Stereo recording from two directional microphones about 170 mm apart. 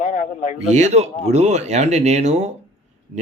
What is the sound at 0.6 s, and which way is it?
Speech, 40° right (ahead or behind).